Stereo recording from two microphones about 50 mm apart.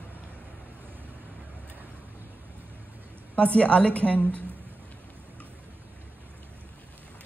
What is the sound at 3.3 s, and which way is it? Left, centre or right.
Speech, left.